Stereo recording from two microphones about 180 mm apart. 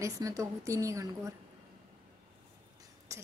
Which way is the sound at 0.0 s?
15° right (ahead or behind).